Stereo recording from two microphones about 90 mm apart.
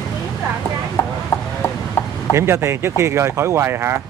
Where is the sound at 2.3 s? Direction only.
30° right (ahead or behind).